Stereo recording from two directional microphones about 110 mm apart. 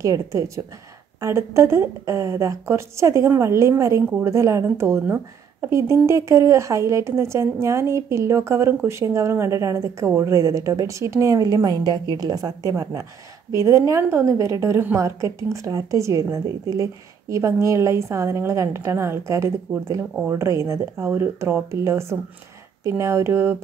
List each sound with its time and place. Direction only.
0.0 s a woman's voice: 30° right (ahead or behind)